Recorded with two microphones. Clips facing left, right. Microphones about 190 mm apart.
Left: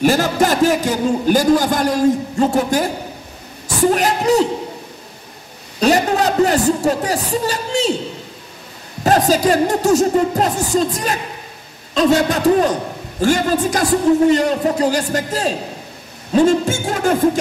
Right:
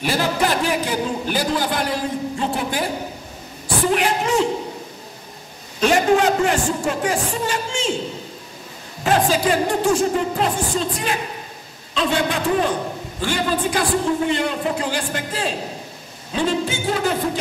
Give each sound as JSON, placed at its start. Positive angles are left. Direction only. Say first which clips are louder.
{"t": 0.0, "sound": "a man's voice", "louder": "left 6 dB", "side_deg": 45}
{"t": 5.8, "sound": "speech", "louder": "left 1 dB", "side_deg": 40}
{"t": 9.0, "sound": "a man's voice", "louder": "left 4 dB", "side_deg": 40}
{"t": 16.3, "sound": "music", "louder": "left 8 dB", "side_deg": 45}